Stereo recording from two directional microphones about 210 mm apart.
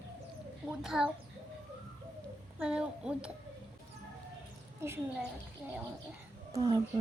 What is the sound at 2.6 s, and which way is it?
Speech, 5° right (ahead or behind).